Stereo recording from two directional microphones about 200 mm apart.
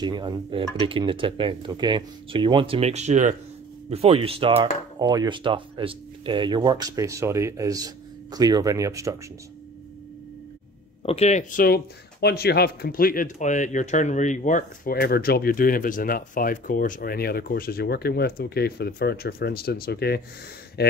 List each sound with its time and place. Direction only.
0.0 s speech: 20° right (ahead or behind)
11.1 s speech: 35° left (ahead or behind); by 20.9 s 55° left (ahead or behind)